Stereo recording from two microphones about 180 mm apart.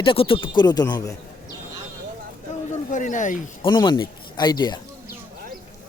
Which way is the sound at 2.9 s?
45° left (ahead or behind).